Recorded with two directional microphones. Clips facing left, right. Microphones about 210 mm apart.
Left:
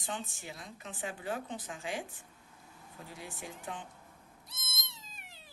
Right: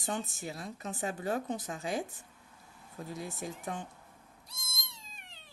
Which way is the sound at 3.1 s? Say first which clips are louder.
Right 6 dB; 40° right (ahead or behind).